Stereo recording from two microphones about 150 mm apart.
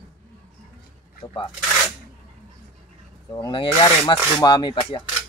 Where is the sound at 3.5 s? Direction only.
35° left (ahead or behind).